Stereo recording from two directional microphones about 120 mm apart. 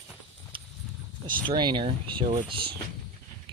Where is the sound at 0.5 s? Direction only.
45° right (ahead or behind).